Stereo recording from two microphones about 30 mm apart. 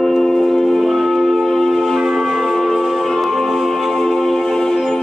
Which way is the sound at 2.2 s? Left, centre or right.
Centre.